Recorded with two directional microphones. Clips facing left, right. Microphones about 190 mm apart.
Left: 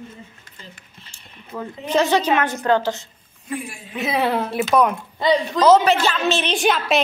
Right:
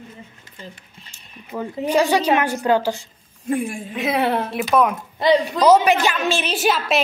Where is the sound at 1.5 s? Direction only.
15° right (ahead or behind).